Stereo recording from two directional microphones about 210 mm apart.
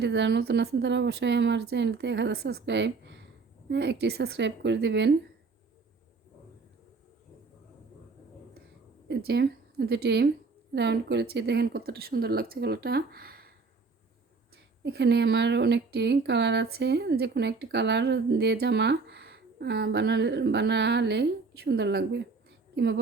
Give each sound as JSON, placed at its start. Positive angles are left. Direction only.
{"t": 0.0, "sound": "speech", "side_deg": -55}
{"t": 9.0, "sound": "a woman's voice", "side_deg": -55}
{"t": 14.8, "sound": "a woman's voice", "side_deg": -55}